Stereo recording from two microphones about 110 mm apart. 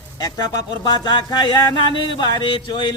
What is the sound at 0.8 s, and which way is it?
Speech, 45° left (ahead or behind).